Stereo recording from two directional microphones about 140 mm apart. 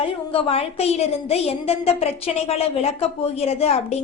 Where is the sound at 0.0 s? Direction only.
40° left (ahead or behind).